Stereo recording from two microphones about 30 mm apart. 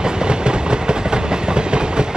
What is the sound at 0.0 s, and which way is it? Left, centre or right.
Train, right.